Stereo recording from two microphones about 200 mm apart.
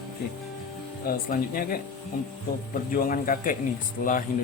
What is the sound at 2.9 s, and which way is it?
Speech, 45° left (ahead or behind).